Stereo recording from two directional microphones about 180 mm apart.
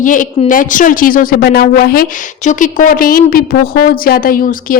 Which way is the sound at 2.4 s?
45° left (ahead or behind).